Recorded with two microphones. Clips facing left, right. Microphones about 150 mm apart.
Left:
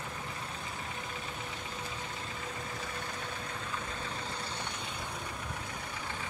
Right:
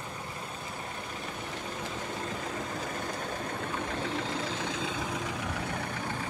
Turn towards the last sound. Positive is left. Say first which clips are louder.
# right 7 dB
turn(degrees=-90)